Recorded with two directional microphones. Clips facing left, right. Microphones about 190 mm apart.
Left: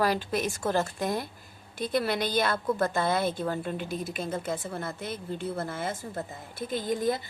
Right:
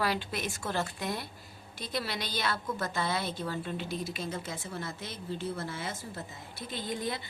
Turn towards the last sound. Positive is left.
turn(degrees=45)  # may be behind; listen again after turning